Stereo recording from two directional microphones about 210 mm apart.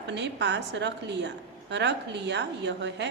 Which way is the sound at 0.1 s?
55° right (ahead or behind).